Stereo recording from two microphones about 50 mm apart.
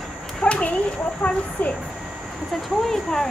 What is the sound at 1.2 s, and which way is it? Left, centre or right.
Speech, left.